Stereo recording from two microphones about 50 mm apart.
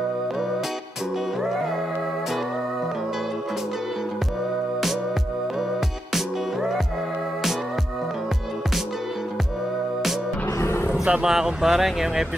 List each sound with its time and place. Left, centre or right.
6.1 s music: centre
10.6 s a sound: left
10.9 s vehicle: right
11.2 s speech: centre